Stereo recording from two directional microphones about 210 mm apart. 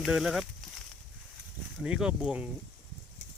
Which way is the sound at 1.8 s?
5° right (ahead or behind).